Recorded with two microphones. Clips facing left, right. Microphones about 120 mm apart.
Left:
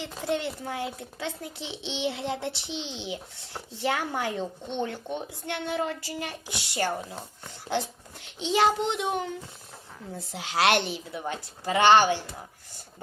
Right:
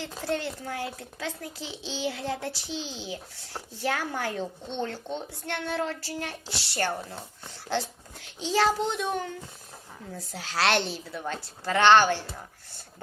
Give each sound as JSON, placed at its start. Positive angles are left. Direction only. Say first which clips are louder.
{"t": 0.2, "sound": "a child's voice", "louder": "left 2 dB", "side_deg": 20}
{"t": 7.4, "sound": "a child's voice", "louder": "left 1 dB", "side_deg": 20}